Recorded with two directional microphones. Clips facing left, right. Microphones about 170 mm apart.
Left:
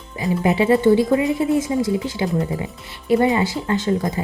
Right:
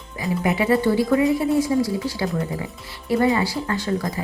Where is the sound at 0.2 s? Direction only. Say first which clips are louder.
Left 3 dB; 25° left (ahead or behind).